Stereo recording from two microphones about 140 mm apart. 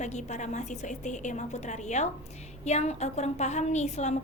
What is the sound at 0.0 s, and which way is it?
A woman's voice, 55° left (ahead or behind).